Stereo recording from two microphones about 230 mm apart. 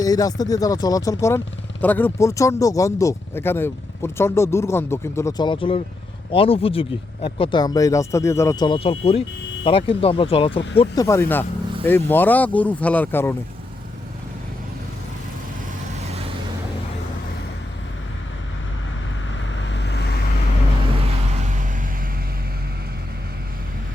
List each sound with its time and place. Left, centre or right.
0.0 s speech: centre
19.5 s vehicle: left